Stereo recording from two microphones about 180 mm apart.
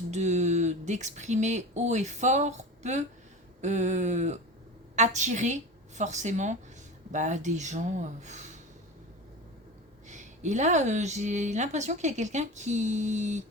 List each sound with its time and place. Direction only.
0.1 s speech: 40° right (ahead or behind)
10.1 s speech: 40° right (ahead or behind)